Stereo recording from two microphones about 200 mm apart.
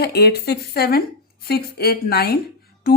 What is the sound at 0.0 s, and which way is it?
Speech, 55° left (ahead or behind).